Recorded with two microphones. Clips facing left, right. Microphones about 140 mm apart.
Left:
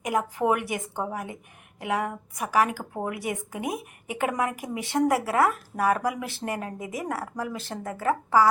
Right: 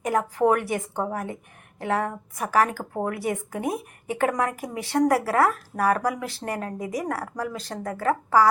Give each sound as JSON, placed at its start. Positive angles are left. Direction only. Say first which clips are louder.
{"t": 0.0, "sound": "speech", "louder": "right 3 dB", "side_deg": 15}